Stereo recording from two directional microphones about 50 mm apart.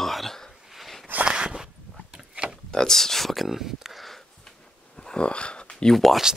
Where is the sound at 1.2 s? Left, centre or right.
Centre.